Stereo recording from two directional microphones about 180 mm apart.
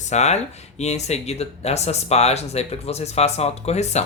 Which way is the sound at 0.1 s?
40° left (ahead or behind).